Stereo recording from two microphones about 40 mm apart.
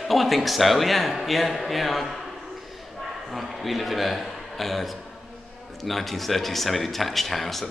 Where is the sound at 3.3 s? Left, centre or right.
Centre.